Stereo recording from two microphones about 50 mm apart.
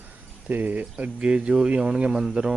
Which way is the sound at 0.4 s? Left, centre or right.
Right.